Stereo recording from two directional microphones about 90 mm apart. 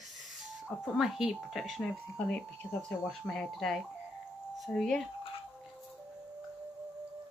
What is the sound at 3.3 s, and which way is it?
Speech, 5° left (ahead or behind).